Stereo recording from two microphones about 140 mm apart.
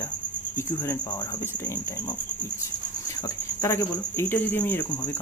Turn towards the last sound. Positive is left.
turn(degrees=15)  # may be behind; listen again after turning